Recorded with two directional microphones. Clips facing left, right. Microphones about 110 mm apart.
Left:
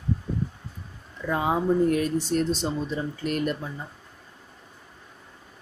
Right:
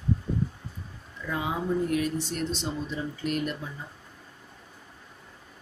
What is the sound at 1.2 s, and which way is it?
Speech, 40° left (ahead or behind).